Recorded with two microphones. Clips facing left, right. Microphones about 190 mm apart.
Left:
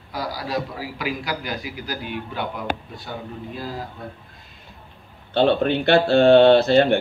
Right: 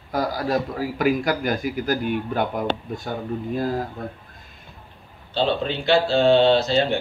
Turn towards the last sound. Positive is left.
turn(degrees=55)  # may be behind; listen again after turning